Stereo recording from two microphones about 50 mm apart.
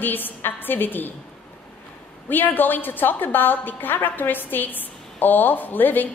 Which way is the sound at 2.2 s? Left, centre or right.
Left.